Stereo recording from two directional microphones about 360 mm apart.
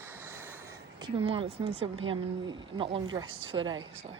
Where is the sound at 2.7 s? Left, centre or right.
Centre.